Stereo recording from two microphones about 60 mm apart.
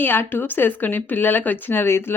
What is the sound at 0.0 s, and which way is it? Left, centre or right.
Speech, left.